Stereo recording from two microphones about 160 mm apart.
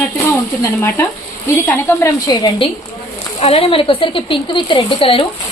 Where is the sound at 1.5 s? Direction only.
15° left (ahead or behind).